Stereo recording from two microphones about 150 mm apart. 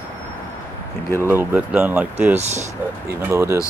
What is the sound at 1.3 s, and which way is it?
Speech, 10° right (ahead or behind).